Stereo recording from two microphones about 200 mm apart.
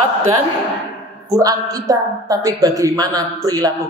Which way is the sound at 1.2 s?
20° right (ahead or behind).